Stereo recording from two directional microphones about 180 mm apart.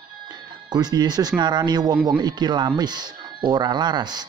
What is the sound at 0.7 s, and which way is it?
Speech, 25° right (ahead or behind).